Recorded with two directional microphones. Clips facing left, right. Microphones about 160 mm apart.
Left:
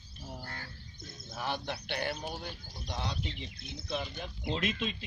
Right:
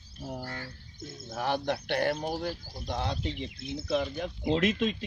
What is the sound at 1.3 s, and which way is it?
Speech, 60° right (ahead or behind).